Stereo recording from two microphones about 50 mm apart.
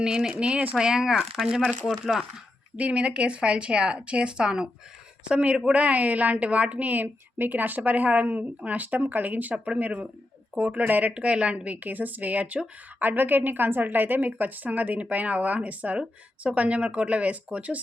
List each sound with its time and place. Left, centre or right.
0.0 s speech: centre
1.9 s speech: centre
2.7 s a woman's voice: right
13.0 s a woman's voice: right